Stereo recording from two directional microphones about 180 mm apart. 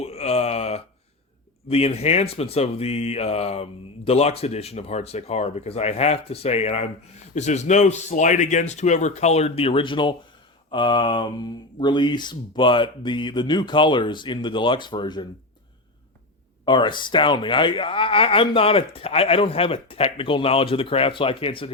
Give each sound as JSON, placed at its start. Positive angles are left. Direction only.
{"t": 0.0, "sound": "a sound", "side_deg": 35}
{"t": 1.7, "sound": "speech", "side_deg": 35}
{"t": 16.6, "sound": "speech", "side_deg": 25}